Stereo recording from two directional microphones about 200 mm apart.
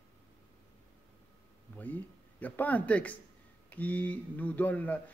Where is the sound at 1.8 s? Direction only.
10° left (ahead or behind).